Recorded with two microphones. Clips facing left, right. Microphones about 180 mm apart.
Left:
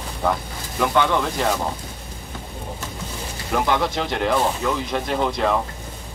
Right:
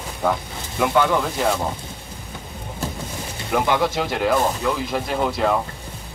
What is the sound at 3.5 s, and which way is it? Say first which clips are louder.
Speech: right 1 dB; 5° right (ahead or behind).